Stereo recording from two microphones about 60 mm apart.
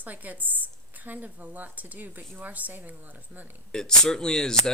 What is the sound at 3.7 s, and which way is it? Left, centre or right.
Speech, centre.